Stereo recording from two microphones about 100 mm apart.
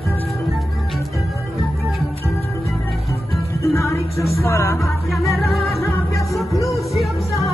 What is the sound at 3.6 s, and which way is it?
Music, 30° left (ahead or behind).